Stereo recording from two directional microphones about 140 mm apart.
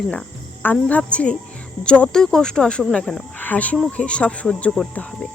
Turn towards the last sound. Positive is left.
turn(degrees=5)  # may be behind; listen again after turning